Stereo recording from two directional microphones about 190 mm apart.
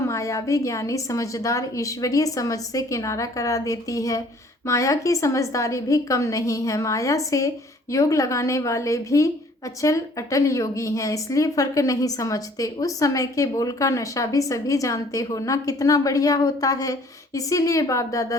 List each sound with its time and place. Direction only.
0.0 s speech: 15° left (ahead or behind)